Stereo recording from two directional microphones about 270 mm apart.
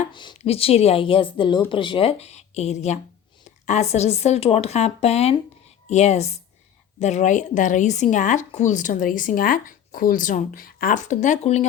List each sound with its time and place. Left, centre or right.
0.0 s speech: centre